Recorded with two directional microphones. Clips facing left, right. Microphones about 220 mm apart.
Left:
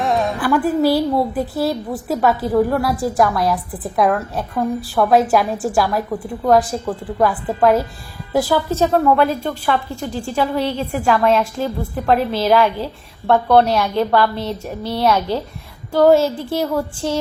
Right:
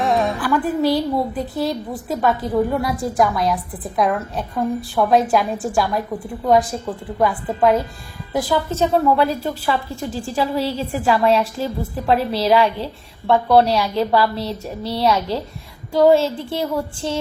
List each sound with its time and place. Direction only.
0.0 s music: centre (ahead or behind)
0.4 s a woman's voice: 10° left (ahead or behind)
16.1 s speech: 25° right (ahead or behind)